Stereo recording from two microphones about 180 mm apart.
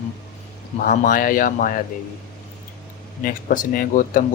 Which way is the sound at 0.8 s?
50° left (ahead or behind).